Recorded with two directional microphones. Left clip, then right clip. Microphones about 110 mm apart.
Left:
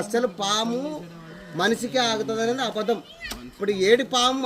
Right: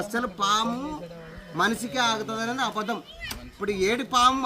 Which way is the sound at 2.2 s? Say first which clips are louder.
Left 3 dB; 30° right (ahead or behind).